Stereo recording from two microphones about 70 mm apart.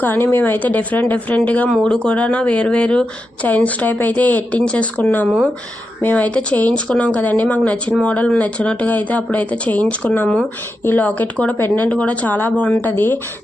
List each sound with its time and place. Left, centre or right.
0.0 s speech: left